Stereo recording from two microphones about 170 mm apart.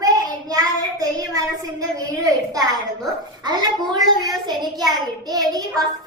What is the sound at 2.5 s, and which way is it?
A woman's voice, 20° right (ahead or behind).